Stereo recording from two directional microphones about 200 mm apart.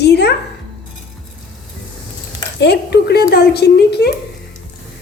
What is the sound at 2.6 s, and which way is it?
A woman's voice, 55° left (ahead or behind).